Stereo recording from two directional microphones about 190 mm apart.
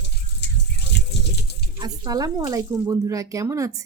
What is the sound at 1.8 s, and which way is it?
A woman's voice, 20° right (ahead or behind).